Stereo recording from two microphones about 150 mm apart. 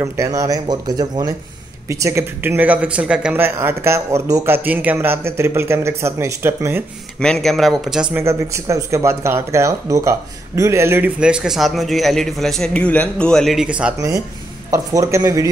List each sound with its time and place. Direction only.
0.0 s speech: 20° right (ahead or behind)
7.2 s speech: 5° left (ahead or behind)
8.2 s speech: 20° right (ahead or behind)
13.9 s speech: 20° right (ahead or behind)